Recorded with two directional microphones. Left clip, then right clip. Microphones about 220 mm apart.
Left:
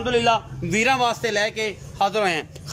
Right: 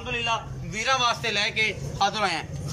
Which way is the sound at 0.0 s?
50° left (ahead or behind).